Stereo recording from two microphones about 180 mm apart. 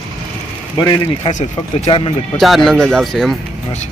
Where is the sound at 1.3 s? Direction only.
35° left (ahead or behind).